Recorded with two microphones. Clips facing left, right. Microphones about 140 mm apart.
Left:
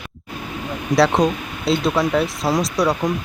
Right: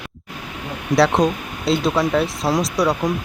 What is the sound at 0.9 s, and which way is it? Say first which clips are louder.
Speech: even; centre (ahead or behind).